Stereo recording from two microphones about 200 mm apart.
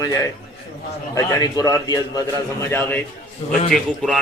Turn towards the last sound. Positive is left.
turn(degrees=0)  # may be behind; listen again after turning